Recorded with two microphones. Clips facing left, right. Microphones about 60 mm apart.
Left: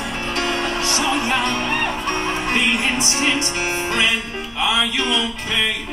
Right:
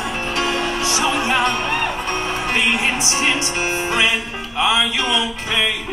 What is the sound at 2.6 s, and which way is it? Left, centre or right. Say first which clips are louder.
Speech: right 1 dB; centre.